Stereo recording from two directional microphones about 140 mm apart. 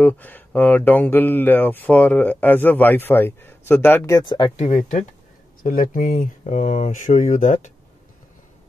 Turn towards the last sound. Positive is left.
turn(degrees=60)  # may be behind; listen again after turning